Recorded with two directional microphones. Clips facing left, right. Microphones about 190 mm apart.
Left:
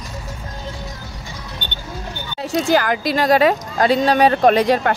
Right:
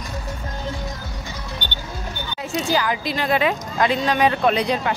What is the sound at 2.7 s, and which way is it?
Speech, 55° left (ahead or behind).